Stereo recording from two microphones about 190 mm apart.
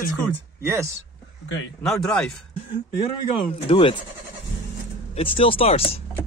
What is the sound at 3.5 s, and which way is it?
Speech, 30° left (ahead or behind).